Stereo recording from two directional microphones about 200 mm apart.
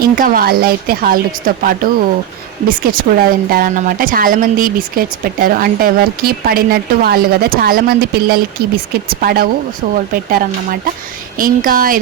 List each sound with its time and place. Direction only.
0.0 s speech: 45° right (ahead or behind)